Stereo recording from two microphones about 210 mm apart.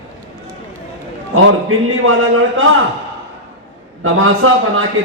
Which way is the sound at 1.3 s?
70° right (ahead or behind).